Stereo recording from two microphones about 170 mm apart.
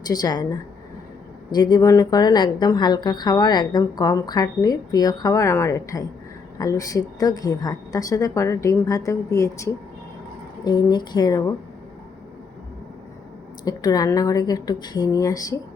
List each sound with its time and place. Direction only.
0.1 s a woman's voice: 25° left (ahead or behind)
1.5 s a woman's voice: 25° left (ahead or behind)
13.7 s a woman's voice: 20° left (ahead or behind)